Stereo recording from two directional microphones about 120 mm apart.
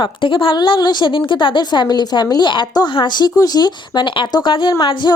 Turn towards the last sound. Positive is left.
turn(degrees=45)  # may be behind; listen again after turning